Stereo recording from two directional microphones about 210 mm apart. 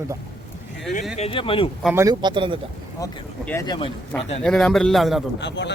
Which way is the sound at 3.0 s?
15° left (ahead or behind).